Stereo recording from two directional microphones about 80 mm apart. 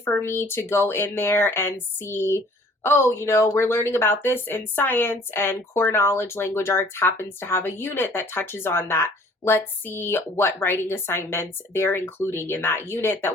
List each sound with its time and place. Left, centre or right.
0.2 s speech: left